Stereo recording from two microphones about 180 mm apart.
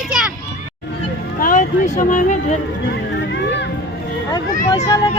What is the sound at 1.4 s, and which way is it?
Speech, 45° left (ahead or behind).